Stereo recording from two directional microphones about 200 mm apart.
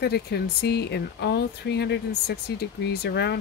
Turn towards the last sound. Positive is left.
turn(degrees=55)  # may be behind; listen again after turning